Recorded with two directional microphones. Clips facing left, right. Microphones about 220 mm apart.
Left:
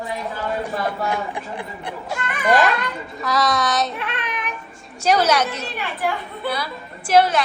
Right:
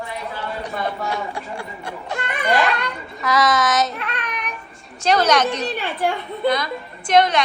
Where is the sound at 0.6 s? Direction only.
15° left (ahead or behind).